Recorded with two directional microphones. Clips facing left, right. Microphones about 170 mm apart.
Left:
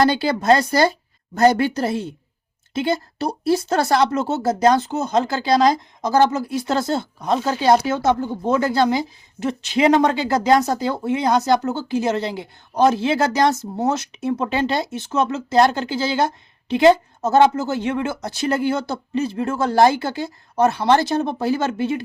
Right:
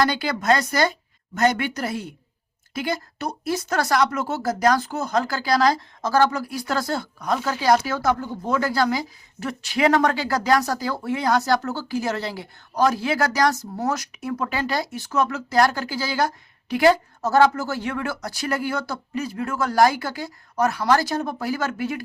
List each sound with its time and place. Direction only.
0.0 s speech: 25° left (ahead or behind)